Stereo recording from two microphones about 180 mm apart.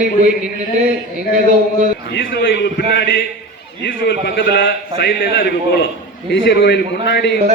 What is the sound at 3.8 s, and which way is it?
A man's voice, 70° left (ahead or behind).